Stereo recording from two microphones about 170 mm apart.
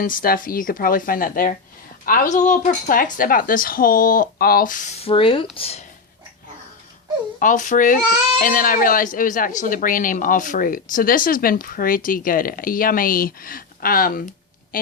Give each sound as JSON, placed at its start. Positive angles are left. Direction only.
{"t": 0.0, "sound": "speech", "side_deg": 55}
{"t": 7.3, "sound": "speech", "side_deg": 50}